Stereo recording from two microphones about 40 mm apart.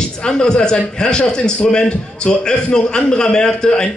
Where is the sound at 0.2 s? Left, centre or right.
Left.